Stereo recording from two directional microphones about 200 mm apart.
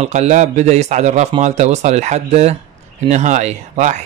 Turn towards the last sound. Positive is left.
turn(degrees=-35)  # may be behind; listen again after turning